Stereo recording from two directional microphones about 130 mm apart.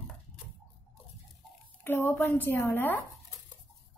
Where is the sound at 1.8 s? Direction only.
15° left (ahead or behind).